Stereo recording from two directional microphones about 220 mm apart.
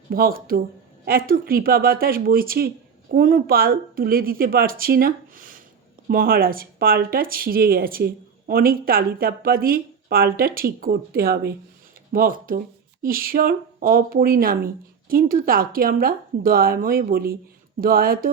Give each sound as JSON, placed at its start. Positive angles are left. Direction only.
{"t": 0.1, "sound": "speech", "side_deg": -40}